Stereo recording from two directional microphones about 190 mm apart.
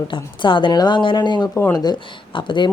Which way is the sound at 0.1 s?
25° left (ahead or behind).